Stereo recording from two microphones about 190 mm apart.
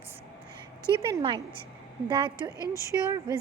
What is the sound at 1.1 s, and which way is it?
A woman's voice, 25° right (ahead or behind).